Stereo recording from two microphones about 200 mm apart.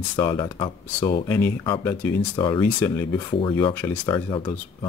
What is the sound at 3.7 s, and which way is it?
Speech, 10° left (ahead or behind).